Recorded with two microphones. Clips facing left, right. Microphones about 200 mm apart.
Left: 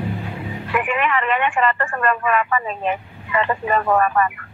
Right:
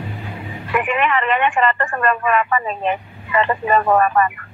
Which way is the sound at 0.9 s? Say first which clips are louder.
Right 2 dB; 30° right (ahead or behind).